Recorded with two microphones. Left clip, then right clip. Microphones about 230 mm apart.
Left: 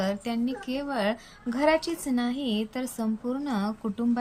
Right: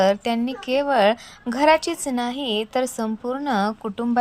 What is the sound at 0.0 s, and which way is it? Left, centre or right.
A woman's voice, centre.